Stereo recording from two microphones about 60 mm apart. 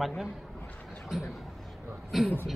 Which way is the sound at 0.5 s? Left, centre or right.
Left.